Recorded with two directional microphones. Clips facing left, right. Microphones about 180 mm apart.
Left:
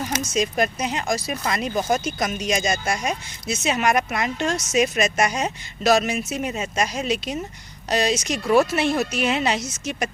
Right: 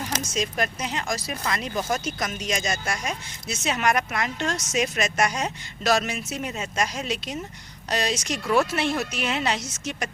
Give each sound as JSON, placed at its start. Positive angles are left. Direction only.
{"t": 0.3, "sound": "speech", "side_deg": 15}
{"t": 5.1, "sound": "speech", "side_deg": 20}